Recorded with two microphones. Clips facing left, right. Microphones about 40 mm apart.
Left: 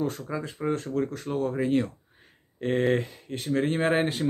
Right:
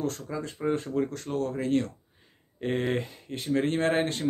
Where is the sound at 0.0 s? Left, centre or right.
Centre.